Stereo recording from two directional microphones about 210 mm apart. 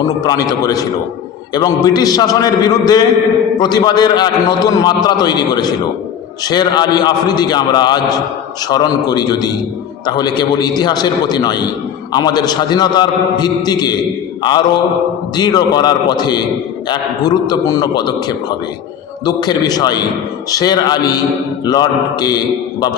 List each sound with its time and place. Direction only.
0.0 s a man's voice: 15° left (ahead or behind)
15.4 s a man's voice: 20° left (ahead or behind)